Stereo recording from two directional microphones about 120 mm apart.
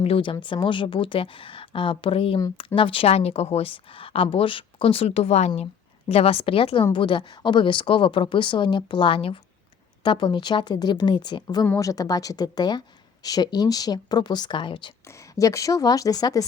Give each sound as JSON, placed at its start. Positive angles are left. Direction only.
{"t": 0.0, "sound": "speech", "side_deg": 50}
{"t": 6.1, "sound": "a woman's voice", "side_deg": 55}
{"t": 15.0, "sound": "a woman's voice", "side_deg": 25}